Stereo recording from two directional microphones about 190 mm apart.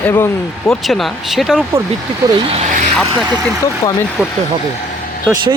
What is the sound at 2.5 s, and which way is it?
Vehicle, 40° right (ahead or behind).